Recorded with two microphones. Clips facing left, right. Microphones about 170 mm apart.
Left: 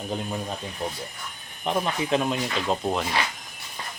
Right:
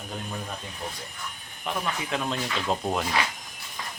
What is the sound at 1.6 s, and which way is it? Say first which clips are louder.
Speech: left 5 dB; 20° left (ahead or behind).